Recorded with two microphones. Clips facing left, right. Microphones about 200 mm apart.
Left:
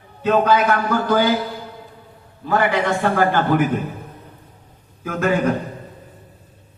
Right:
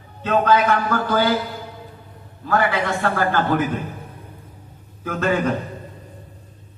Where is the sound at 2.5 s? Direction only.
15° left (ahead or behind).